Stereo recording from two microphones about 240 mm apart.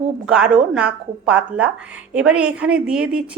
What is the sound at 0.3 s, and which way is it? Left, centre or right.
A woman's voice, centre.